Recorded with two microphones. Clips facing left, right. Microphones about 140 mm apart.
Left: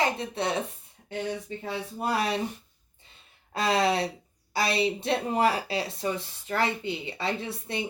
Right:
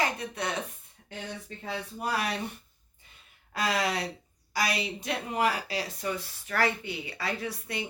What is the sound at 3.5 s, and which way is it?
Speech, 25° left (ahead or behind).